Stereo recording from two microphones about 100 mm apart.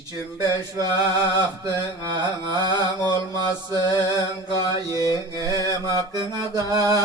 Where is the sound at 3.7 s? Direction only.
45° left (ahead or behind).